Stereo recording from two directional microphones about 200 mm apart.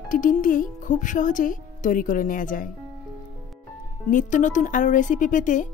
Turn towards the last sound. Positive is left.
turn(degrees=40)  # may be behind; listen again after turning